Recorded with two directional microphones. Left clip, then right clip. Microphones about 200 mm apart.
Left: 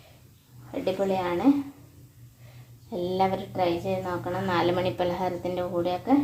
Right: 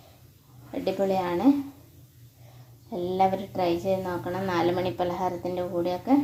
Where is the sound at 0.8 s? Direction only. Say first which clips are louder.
Right 1 dB; 15° right (ahead or behind).